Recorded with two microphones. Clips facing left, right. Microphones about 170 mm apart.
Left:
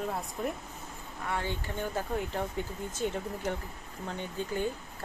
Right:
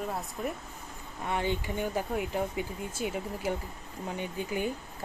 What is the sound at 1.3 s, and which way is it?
Speech, 15° right (ahead or behind).